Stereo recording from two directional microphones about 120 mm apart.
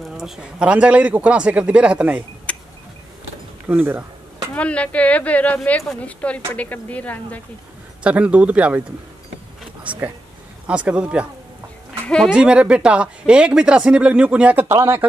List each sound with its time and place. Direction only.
0.1 s speech: 5° right (ahead or behind)
2.5 s a sound: 10° left (ahead or behind)
3.6 s a sound: 15° right (ahead or behind)
4.6 s a woman's voice: 10° left (ahead or behind)
8.0 s speech: 10° right (ahead or behind)
9.8 s speech: 15° right (ahead or behind)
12.3 s speech: 10° right (ahead or behind)